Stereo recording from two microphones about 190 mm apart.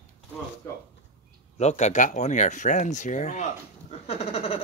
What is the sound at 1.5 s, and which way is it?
Speech, 35° left (ahead or behind).